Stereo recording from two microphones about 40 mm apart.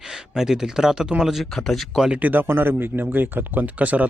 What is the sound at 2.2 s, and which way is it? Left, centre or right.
Speech, right.